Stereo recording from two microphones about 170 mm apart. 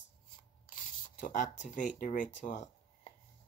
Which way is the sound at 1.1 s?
50° left (ahead or behind).